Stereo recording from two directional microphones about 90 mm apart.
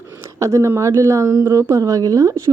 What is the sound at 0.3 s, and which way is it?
A woman's voice, 35° right (ahead or behind).